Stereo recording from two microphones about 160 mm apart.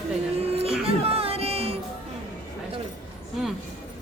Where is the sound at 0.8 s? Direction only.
40° right (ahead or behind).